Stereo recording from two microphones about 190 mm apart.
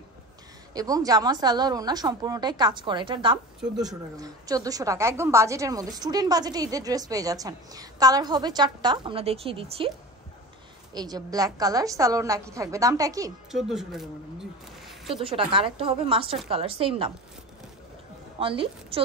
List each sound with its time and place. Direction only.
0.7 s a woman's voice: 20° right (ahead or behind)
10.9 s a woman's voice: 20° right (ahead or behind)
13.5 s a woman's voice: centre (ahead or behind)
15.1 s a woman's voice: 30° right (ahead or behind)
18.4 s a woman's voice: 30° right (ahead or behind)